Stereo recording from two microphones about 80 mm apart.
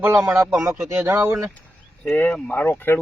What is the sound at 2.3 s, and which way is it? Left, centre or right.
Speech, centre.